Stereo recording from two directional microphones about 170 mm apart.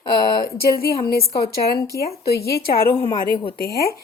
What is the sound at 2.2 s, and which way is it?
Speech, 65° left (ahead or behind).